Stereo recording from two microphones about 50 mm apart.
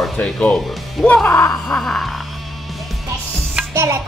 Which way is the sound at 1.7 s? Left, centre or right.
Centre.